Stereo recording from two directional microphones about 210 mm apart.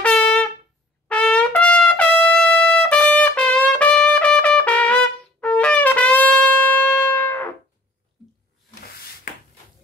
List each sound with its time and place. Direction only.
0.0 s wind instrument: 5° left (ahead or behind)
1.0 s trumpet: 5° left (ahead or behind)
8.8 s a sound: 45° left (ahead or behind)